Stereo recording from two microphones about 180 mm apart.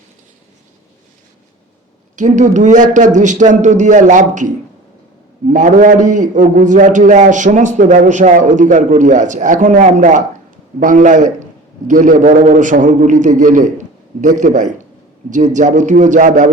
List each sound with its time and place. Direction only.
2.1 s a man's voice: 45° right (ahead or behind)